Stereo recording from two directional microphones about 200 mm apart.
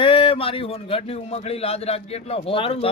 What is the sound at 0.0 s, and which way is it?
A man's voice, 25° left (ahead or behind).